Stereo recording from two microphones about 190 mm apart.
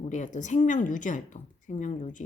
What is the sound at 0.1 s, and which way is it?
Speech, 40° left (ahead or behind).